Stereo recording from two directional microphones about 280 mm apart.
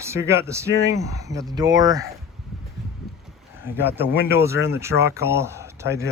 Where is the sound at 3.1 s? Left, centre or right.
Right.